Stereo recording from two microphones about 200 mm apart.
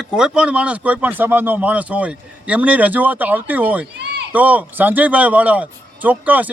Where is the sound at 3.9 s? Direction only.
60° right (ahead or behind).